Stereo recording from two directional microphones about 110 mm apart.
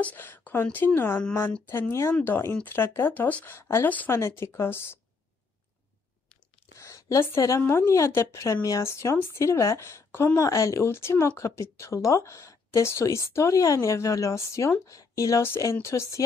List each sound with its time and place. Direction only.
0.0 s a woman's voice: 15° left (ahead or behind)
6.8 s a woman's voice: 30° left (ahead or behind)